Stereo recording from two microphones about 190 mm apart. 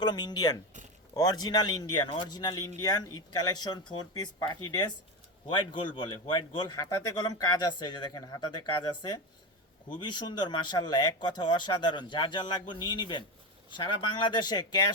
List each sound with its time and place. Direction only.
0.0 s a man's voice: 20° left (ahead or behind)